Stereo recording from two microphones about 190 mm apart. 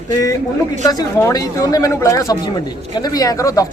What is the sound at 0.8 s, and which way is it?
A man's voice, 20° left (ahead or behind).